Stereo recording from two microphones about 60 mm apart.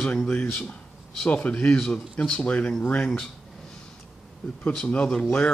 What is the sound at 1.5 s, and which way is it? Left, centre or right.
Speech, centre.